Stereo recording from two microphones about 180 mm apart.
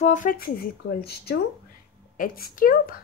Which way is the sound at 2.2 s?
50° left (ahead or behind).